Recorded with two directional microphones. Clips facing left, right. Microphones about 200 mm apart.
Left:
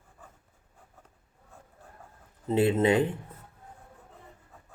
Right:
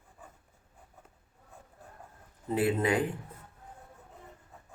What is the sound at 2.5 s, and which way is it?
Speech, 25° left (ahead or behind).